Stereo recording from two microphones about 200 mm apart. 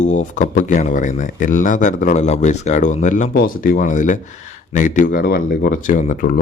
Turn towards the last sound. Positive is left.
turn(degrees=40)  # may be behind; listen again after turning